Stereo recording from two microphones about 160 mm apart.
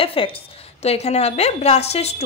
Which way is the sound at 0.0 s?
35° left (ahead or behind).